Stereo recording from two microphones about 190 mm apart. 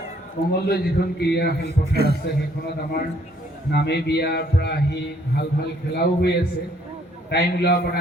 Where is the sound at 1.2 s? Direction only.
60° left (ahead or behind).